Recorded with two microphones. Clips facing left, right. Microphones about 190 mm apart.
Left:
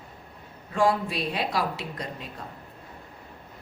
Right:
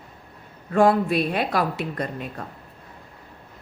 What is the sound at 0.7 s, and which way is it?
A woman's voice, 55° right (ahead or behind).